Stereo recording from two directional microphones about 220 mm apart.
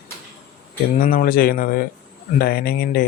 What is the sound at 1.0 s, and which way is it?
Speech, 40° left (ahead or behind).